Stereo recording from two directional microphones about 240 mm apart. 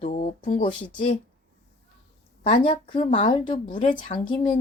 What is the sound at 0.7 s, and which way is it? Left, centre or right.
Speech, centre.